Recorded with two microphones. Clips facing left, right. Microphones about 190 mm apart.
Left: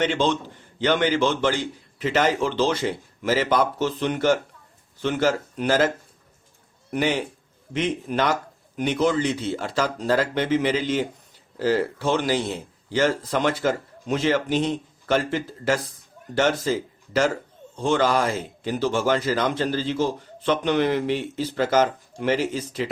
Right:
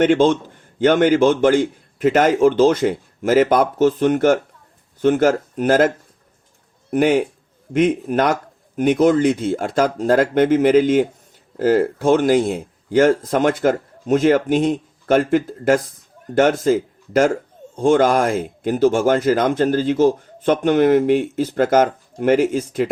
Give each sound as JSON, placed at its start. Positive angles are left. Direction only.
{"t": 0.0, "sound": "speech", "side_deg": -50}
{"t": 6.9, "sound": "speech", "side_deg": -50}